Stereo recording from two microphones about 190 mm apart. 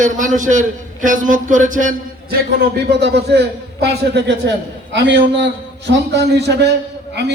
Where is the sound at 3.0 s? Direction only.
60° right (ahead or behind).